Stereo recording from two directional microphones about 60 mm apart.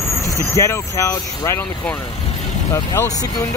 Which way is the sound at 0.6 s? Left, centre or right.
Left.